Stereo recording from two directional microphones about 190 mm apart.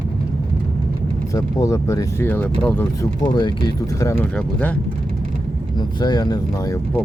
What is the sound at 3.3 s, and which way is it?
Speech, 20° left (ahead or behind).